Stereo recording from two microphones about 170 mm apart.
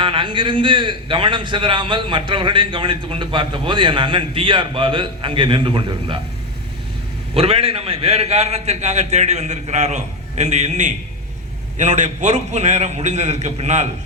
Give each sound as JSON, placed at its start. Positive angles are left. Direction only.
{"t": 0.0, "sound": "a man's voice", "side_deg": -30}
{"t": 7.3, "sound": "a man's voice", "side_deg": -35}